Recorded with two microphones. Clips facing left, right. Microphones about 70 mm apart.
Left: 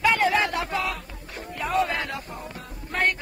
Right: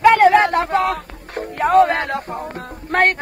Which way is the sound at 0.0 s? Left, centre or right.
Right.